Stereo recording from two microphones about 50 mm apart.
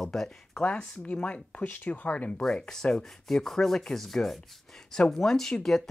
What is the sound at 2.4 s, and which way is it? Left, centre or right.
Speech, centre.